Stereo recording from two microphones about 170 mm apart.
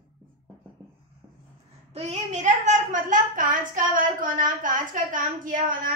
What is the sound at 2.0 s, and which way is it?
A woman's voice, 40° right (ahead or behind).